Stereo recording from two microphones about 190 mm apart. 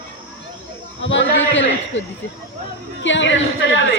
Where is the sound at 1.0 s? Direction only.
75° left (ahead or behind).